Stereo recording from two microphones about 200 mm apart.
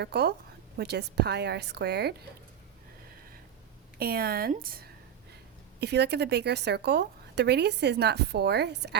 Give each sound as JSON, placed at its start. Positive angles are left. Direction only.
{"t": 0.0, "sound": "a woman's voice", "side_deg": -55}
{"t": 3.9, "sound": "a woman's voice", "side_deg": -50}